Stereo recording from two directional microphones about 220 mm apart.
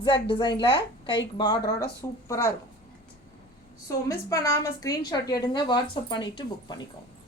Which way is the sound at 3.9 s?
15° left (ahead or behind).